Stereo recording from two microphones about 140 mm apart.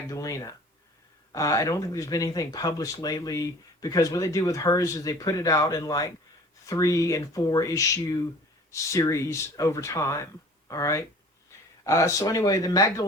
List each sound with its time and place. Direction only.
0.1 s speech: 25° left (ahead or behind)